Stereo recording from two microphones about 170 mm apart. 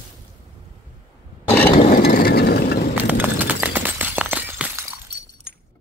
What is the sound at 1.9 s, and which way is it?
Vehicle, 55° left (ahead or behind).